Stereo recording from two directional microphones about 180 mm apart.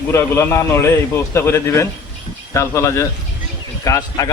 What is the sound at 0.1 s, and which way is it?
Speech, 15° left (ahead or behind).